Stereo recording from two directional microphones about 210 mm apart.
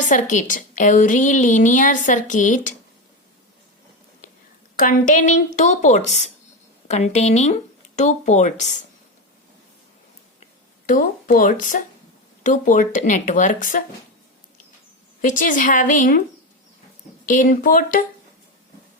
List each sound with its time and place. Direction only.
0.1 s a woman's voice: 35° left (ahead or behind)
4.8 s a woman's voice: 40° left (ahead or behind)
10.8 s a woman's voice: 40° left (ahead or behind)
15.2 s a woman's voice: 40° left (ahead or behind)
17.2 s a woman's voice: 40° left (ahead or behind)